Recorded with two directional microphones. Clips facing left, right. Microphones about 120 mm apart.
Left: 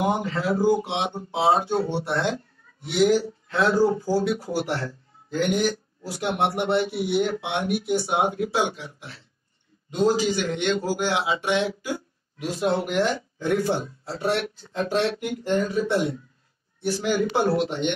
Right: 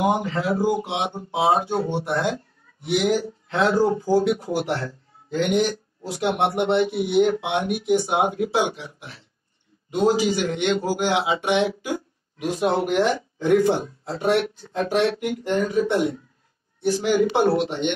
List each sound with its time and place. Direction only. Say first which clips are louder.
0.3 s speech: left 1 dB; 20° right (ahead or behind)